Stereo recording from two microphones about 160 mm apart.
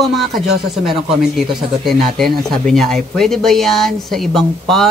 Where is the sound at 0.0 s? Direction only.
Centre (ahead or behind).